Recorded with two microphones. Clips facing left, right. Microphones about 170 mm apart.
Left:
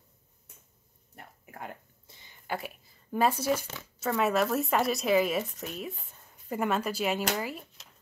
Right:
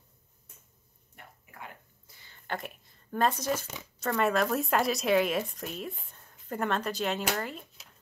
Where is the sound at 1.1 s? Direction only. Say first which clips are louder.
Left 4 dB; 45° left (ahead or behind).